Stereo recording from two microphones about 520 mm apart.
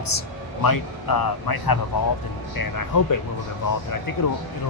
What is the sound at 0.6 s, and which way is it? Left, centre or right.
Speech, left.